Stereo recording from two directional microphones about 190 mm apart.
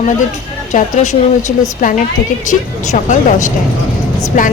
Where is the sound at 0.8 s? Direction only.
40° left (ahead or behind).